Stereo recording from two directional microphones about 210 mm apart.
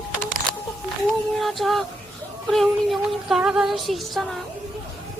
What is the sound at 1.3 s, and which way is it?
Child singing, centre (ahead or behind).